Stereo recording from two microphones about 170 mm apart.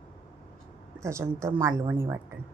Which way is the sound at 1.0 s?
15° right (ahead or behind).